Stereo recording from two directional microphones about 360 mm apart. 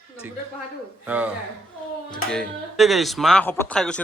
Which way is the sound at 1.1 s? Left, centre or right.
Centre.